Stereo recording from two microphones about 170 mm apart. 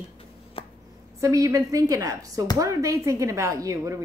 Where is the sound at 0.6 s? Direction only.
30° left (ahead or behind).